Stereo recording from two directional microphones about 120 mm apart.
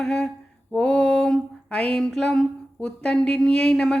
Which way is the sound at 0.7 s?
5° left (ahead or behind).